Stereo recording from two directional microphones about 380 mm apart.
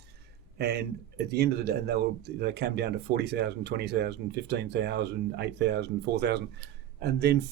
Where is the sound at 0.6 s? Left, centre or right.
Right.